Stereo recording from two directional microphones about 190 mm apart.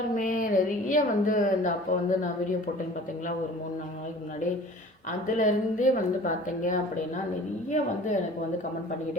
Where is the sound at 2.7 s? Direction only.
50° left (ahead or behind).